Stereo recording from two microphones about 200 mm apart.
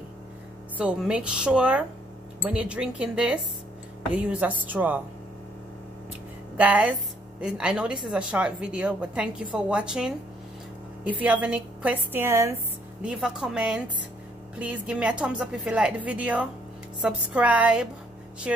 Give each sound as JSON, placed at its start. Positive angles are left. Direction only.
{"t": 0.7, "sound": "a woman's voice", "side_deg": -5}
{"t": 6.5, "sound": "a woman's voice", "side_deg": -5}